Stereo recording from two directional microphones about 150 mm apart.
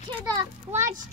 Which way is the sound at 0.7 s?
55° right (ahead or behind).